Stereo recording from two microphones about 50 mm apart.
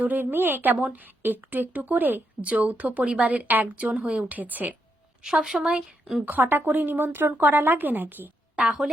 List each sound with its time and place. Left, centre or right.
0.0 s speech: right
0.8 s a woman's voice: right
1.0 s a woman's voice: right
2.4 s a woman's voice: right
3.9 s a woman's voice: centre
4.3 s a woman's voice: right
5.2 s a woman's voice: centre
6.2 s a woman's voice: right
8.5 s a woman's voice: right